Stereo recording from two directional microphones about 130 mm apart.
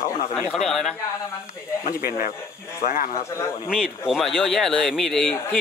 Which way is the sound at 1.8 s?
90° left.